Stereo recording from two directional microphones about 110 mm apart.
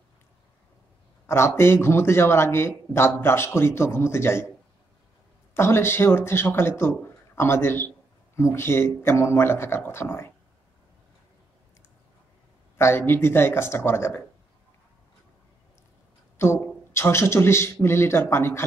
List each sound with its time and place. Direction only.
1.2 s a man's voice: 25° left (ahead or behind)
5.5 s a man's voice: 25° left (ahead or behind)
12.7 s a man's voice: 20° left (ahead or behind)
16.3 s a man's voice: 25° left (ahead or behind)